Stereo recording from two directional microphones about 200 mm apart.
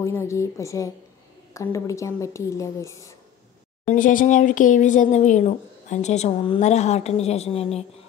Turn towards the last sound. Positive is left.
turn(degrees=30)  # may be behind; listen again after turning